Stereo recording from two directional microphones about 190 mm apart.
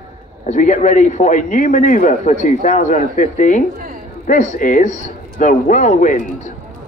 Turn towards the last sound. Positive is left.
turn(degrees=40)  # may be behind; listen again after turning